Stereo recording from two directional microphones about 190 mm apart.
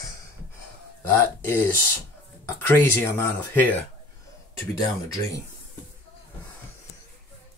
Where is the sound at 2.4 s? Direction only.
10° left (ahead or behind).